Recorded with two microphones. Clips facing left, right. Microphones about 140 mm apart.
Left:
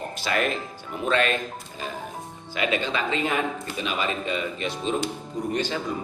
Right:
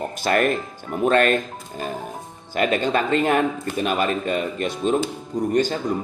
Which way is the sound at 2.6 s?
45° right (ahead or behind).